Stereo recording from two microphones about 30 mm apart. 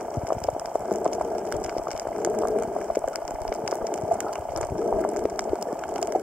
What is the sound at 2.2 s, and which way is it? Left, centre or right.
Water, right.